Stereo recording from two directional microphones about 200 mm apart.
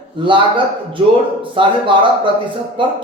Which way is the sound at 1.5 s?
25° right (ahead or behind).